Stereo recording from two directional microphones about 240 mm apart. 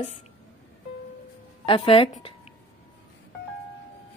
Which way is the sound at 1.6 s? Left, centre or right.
Left.